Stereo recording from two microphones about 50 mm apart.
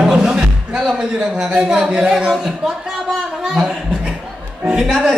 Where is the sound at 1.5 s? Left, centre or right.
Centre.